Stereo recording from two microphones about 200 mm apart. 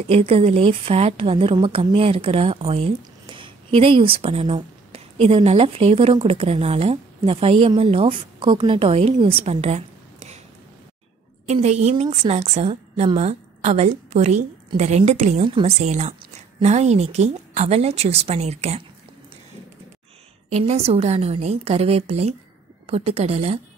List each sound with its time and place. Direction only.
0.0 s a woman's voice: 30° right (ahead or behind)
11.4 s a woman's voice: 35° right (ahead or behind)
20.5 s a woman's voice: 35° right (ahead or behind)